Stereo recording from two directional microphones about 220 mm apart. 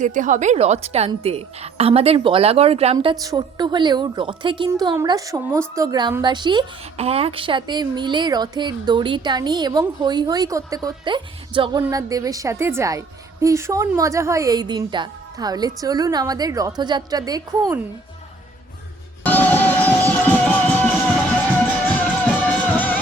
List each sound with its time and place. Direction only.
0.0 s a woman's voice: 35° right (ahead or behind); by 17.7 s 15° right (ahead or behind)
19.2 s music: 5° left (ahead or behind)